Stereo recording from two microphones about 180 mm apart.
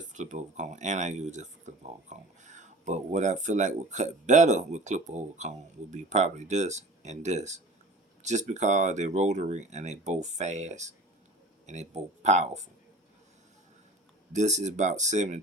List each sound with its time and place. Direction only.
0.1 s speech: 45° right (ahead or behind)
14.3 s speech: 40° right (ahead or behind)